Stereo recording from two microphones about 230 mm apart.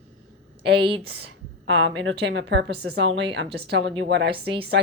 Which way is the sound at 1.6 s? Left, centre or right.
Right.